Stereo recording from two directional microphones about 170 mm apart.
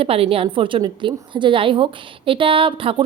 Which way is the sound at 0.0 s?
35° right (ahead or behind).